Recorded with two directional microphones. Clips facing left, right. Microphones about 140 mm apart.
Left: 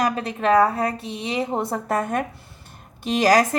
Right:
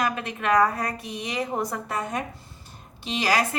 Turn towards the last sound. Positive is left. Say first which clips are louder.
# left 7 dB
turn(degrees=45)  # may be behind; listen again after turning